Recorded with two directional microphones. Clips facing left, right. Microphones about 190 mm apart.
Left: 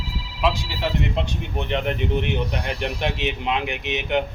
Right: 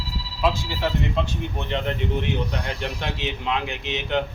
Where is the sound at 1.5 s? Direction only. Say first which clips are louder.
Left 4 dB; 15° left (ahead or behind).